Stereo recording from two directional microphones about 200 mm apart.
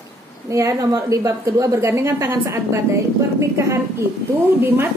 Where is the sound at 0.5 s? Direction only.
15° right (ahead or behind).